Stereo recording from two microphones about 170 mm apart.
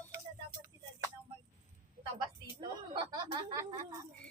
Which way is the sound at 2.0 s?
45° right (ahead or behind).